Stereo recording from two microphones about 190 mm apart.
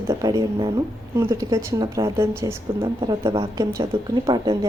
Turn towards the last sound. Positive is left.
turn(degrees=-20)  # may be behind; listen again after turning